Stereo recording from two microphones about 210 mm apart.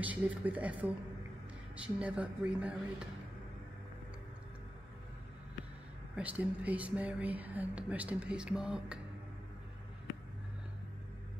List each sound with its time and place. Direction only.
0.0 s speech: 5° right (ahead or behind)
6.1 s speech: 5° right (ahead or behind)